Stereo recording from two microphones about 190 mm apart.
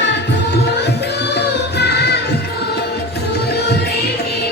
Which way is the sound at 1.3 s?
60° left (ahead or behind).